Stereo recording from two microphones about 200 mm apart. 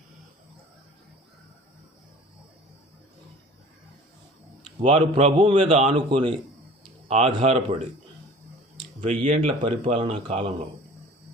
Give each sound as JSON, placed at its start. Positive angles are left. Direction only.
{"t": 4.8, "sound": "speech", "side_deg": -30}
{"t": 8.8, "sound": "speech", "side_deg": -25}